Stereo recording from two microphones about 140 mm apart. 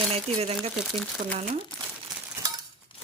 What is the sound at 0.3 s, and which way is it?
Speech, 45° right (ahead or behind).